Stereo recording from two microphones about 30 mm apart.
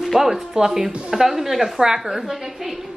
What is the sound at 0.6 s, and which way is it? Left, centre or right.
Speech, centre.